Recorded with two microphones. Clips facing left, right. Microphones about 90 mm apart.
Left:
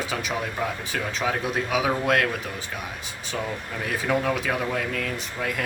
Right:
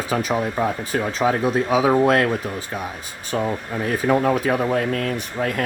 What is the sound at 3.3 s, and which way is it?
Speech, 45° right (ahead or behind).